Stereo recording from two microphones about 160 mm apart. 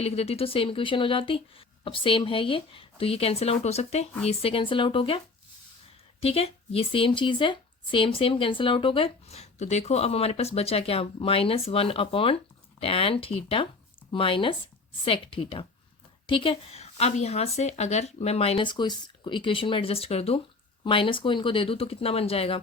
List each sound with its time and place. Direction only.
0.0 s speech: 40° left (ahead or behind)